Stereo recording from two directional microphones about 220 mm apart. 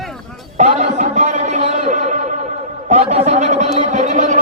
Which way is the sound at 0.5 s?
35° right (ahead or behind).